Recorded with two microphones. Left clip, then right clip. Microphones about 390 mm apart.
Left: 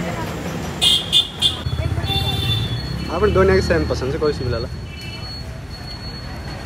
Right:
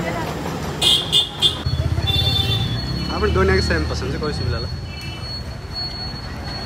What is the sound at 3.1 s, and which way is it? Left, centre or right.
Speech, centre.